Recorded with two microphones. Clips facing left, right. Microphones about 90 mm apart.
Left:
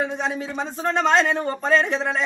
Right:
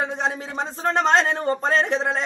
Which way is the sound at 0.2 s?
30° right (ahead or behind).